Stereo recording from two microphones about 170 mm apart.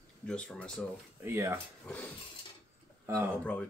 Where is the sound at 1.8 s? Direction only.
10° left (ahead or behind).